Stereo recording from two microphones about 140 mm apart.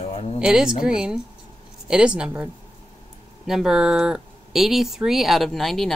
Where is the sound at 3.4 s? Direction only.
5° right (ahead or behind).